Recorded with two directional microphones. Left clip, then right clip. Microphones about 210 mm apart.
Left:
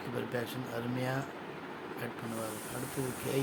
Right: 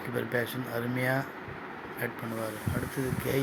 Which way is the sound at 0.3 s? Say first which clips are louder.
Right 6 dB; 15° right (ahead or behind).